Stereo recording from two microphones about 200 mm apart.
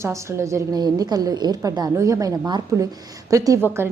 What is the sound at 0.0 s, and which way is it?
A woman's voice, 15° right (ahead or behind).